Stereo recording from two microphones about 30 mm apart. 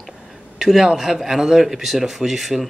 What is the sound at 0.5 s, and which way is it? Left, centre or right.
A man's voice, centre.